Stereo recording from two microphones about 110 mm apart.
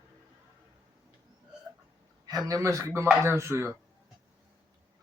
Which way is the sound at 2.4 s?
30° right (ahead or behind).